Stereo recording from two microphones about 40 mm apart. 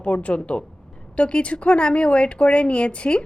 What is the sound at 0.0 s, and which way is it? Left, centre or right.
Speech, left.